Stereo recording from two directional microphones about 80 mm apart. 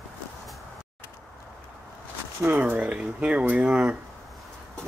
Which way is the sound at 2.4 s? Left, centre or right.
Right.